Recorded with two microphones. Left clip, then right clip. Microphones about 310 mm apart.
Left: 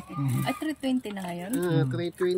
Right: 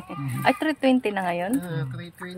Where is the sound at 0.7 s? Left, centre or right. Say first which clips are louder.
Right 9 dB; centre.